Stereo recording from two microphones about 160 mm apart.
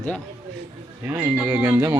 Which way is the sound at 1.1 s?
10° right (ahead or behind).